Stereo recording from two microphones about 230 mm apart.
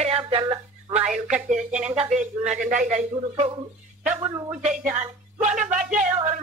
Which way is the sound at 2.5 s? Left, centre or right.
Right.